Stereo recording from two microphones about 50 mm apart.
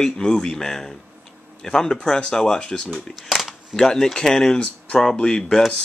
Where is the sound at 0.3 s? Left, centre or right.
Centre.